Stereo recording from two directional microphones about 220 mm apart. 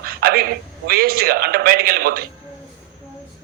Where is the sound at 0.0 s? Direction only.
45° right (ahead or behind).